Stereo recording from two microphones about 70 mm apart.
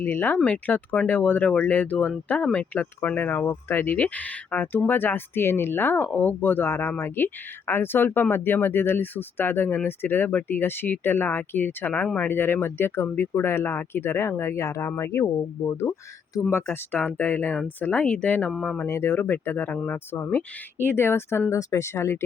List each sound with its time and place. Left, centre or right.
0.0 s speech: left
16.9 s speech: left
18.9 s speech: left
19.1 s speech: left
21.5 s speech: left
21.9 s speech: left